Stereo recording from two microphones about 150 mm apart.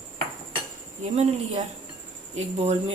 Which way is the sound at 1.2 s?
50° right (ahead or behind).